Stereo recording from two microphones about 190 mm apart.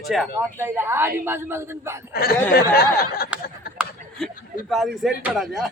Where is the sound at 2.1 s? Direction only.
55° left (ahead or behind).